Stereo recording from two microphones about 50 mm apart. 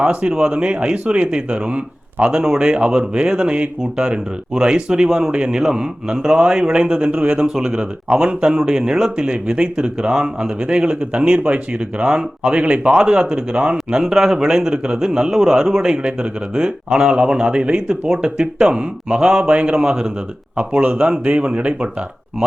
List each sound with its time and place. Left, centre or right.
0.0 s speech: right
2.3 s speech: centre